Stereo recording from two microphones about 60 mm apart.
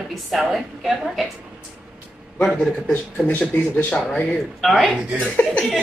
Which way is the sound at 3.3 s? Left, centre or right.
Left.